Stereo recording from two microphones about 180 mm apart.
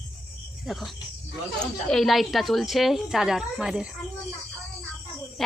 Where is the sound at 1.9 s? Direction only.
Centre (ahead or behind).